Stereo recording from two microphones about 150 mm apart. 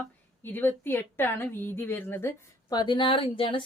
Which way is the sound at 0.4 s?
15° left (ahead or behind).